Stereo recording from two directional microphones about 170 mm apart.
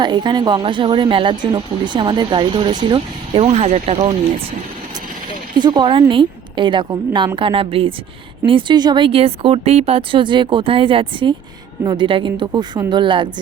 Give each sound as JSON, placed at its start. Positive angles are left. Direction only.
{"t": 0.0, "sound": "speech", "side_deg": -25}
{"t": 5.5, "sound": "speech", "side_deg": -25}